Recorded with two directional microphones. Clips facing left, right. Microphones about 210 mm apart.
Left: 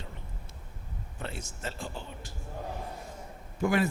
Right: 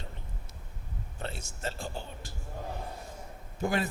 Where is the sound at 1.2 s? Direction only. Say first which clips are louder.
Right 1 dB; 30° right (ahead or behind).